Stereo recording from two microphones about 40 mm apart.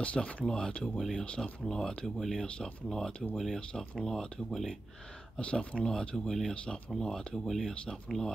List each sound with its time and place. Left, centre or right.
0.0 s speech: left
3.3 s speech: centre
5.4 s speech: left
5.9 s speech: centre
6.5 s speech: left
6.9 s speech: centre